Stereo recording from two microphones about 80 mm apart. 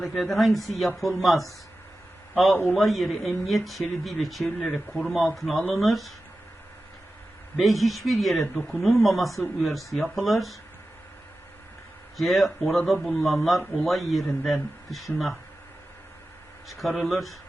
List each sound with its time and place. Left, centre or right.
0.0 s a man's voice: centre
7.5 s speech: centre
8.5 s speech: centre
8.8 s speech: centre
12.1 s speech: centre
16.6 s speech: centre